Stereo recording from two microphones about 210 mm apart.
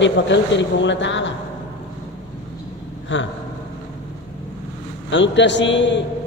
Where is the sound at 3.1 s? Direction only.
60° left (ahead or behind).